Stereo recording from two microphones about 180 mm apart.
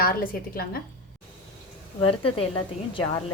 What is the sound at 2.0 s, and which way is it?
A woman's voice, 30° left (ahead or behind).